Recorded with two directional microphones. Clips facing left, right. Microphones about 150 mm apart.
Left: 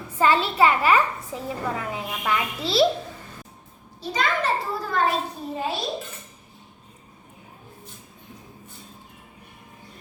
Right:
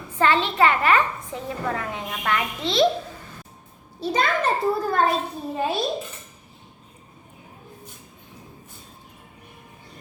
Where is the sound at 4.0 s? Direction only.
55° right (ahead or behind).